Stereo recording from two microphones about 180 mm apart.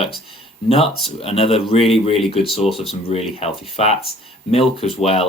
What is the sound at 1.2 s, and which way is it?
Speech, 35° left (ahead or behind).